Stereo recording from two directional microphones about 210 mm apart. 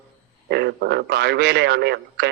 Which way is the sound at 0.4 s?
50° right (ahead or behind).